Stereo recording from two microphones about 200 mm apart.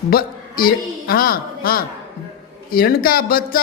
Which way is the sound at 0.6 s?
45° left (ahead or behind).